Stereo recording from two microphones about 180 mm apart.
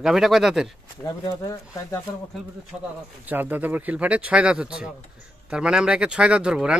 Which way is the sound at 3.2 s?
10° right (ahead or behind).